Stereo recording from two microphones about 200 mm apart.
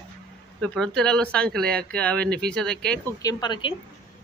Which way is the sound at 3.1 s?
20° left (ahead or behind).